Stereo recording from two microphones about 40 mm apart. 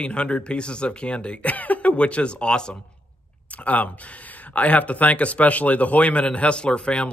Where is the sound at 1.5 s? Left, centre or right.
Left.